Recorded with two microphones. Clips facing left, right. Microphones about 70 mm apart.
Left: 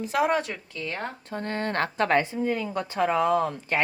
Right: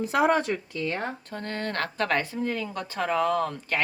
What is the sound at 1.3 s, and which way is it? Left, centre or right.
A woman's voice, left.